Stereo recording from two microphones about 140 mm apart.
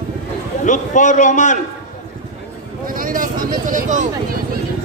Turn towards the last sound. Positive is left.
turn(degrees=-75)  # may be behind; listen again after turning